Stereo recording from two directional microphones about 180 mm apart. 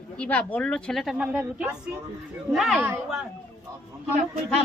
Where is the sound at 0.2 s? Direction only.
10° left (ahead or behind).